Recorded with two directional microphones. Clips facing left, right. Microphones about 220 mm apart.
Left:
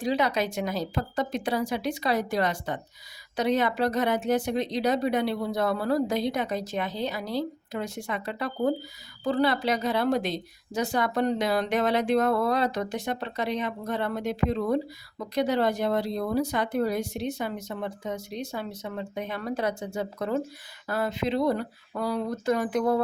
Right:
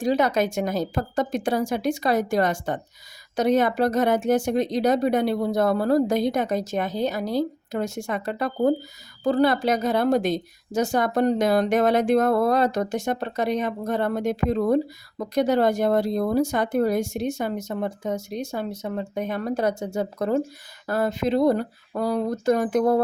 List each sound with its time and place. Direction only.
0.0 s a woman's voice: 45° right (ahead or behind)